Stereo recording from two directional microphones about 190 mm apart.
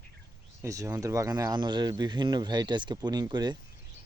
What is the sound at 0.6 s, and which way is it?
Speech, 15° right (ahead or behind).